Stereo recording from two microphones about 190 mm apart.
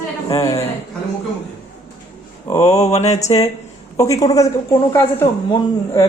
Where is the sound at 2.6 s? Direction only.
35° left (ahead or behind).